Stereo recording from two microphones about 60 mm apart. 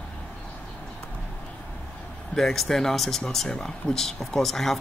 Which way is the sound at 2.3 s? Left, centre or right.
Centre.